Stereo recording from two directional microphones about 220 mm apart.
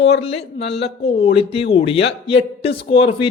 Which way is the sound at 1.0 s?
25° left (ahead or behind).